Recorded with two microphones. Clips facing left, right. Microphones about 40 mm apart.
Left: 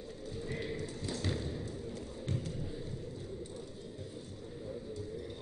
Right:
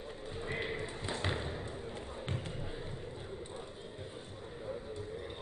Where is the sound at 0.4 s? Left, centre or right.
Right.